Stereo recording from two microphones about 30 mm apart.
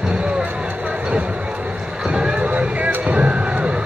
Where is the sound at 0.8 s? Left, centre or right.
Right.